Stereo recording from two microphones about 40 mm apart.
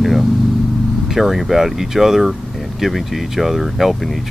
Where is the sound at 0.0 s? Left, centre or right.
Centre.